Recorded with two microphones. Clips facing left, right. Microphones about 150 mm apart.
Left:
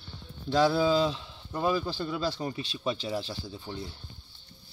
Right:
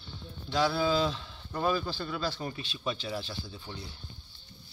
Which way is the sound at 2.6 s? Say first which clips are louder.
Left 3 dB; 35° left (ahead or behind).